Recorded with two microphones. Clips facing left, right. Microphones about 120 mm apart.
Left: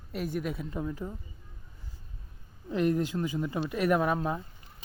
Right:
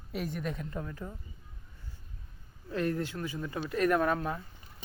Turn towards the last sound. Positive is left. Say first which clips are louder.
# left 2 dB
turn(degrees=15)  # may be behind; listen again after turning